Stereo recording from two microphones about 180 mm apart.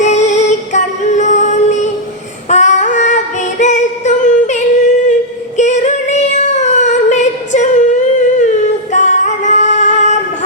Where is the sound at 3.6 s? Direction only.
40° left (ahead or behind).